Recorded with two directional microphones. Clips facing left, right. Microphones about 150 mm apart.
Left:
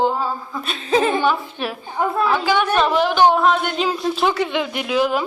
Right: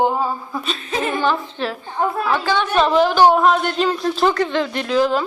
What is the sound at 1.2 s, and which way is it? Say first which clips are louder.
A woman's voice: even; 15° left (ahead or behind).